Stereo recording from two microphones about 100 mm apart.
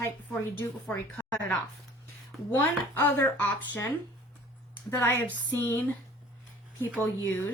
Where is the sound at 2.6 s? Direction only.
20° left (ahead or behind).